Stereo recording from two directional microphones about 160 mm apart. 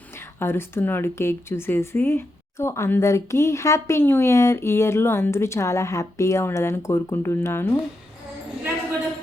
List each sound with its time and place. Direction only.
0.3 s speech: 15° left (ahead or behind)